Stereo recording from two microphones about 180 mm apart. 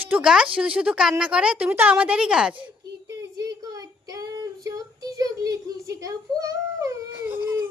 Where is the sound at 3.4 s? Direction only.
20° right (ahead or behind).